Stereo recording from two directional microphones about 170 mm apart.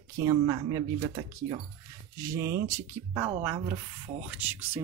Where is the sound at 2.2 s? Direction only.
15° right (ahead or behind).